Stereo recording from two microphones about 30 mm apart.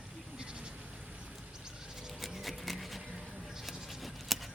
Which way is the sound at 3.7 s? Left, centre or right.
Centre.